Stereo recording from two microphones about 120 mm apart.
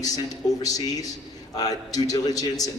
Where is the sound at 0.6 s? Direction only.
30° left (ahead or behind).